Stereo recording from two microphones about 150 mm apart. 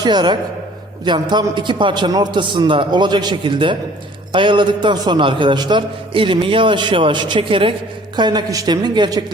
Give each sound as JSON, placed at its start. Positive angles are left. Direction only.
{"t": 0.0, "sound": "a man's voice", "side_deg": -30}